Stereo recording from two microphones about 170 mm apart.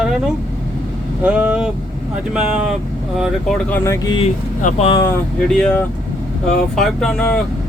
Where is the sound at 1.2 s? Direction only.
5° right (ahead or behind).